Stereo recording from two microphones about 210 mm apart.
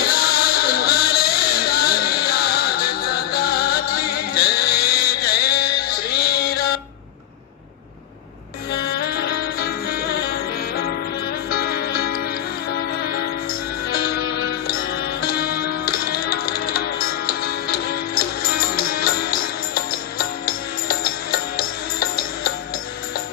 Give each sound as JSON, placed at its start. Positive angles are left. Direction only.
{"t": 0.2, "sound": "music", "side_deg": 45}
{"t": 8.7, "sound": "music", "side_deg": 50}